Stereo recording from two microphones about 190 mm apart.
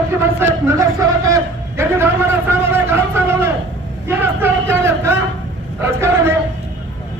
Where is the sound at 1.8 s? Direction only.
15° right (ahead or behind).